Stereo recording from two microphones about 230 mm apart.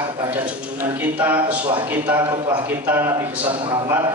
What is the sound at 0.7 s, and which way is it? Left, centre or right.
A man's voice, centre.